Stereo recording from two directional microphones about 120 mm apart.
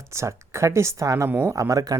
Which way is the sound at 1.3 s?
15° right (ahead or behind).